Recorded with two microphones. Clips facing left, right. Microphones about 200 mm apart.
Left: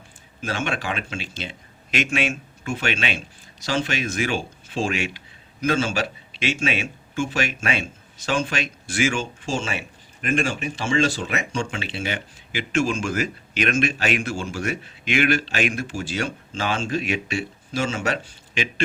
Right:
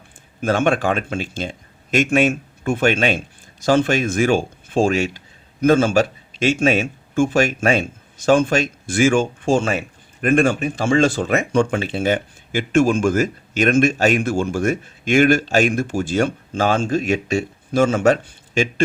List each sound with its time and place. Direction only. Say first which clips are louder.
0.4 s a man's voice: right 9 dB; 50° right (ahead or behind)